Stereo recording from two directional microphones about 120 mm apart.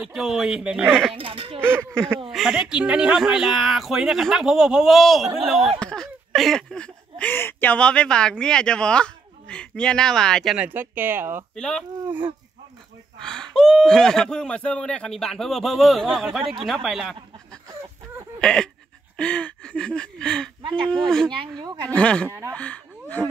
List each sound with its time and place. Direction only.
0.0 s speech: 5° right (ahead or behind)
1.1 s speech: 45° right (ahead or behind)
1.6 s speech: 20° right (ahead or behind)
2.3 s speech: 5° right (ahead or behind)
5.8 s a sound: 5° left (ahead or behind)
10.6 s speech: 15° right (ahead or behind)
11.5 s speech: 5° left (ahead or behind)
13.2 s speech: 5° left (ahead or behind)
18.4 s a sound: 5° left (ahead or behind)
20.6 s a woman's voice: 45° right (ahead or behind)
21.9 s a sound: 10° left (ahead or behind)
22.5 s speech: 10° left (ahead or behind)